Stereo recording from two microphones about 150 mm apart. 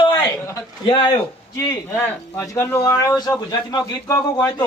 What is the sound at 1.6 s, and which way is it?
A man's voice, 20° left (ahead or behind).